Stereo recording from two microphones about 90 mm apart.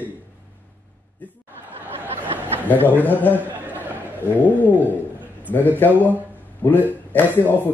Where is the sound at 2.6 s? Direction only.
20° left (ahead or behind).